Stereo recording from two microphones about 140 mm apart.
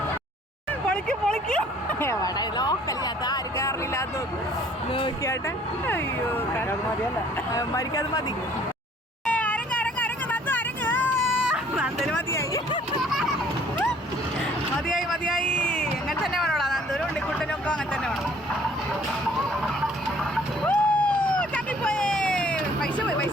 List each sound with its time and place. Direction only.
0.9 s a sound: 5° left (ahead or behind)
2.0 s speech: 25° left (ahead or behind)
5.9 s speech: 15° left (ahead or behind)
7.5 s speech: 25° left (ahead or behind)
9.2 s vehicle: 10° left (ahead or behind)
11.3 s vehicle: 5° right (ahead or behind)
12.1 s a sound: 20° left (ahead or behind)
14.8 s a sound: centre (ahead or behind)
20.3 s vehicle: 10° left (ahead or behind)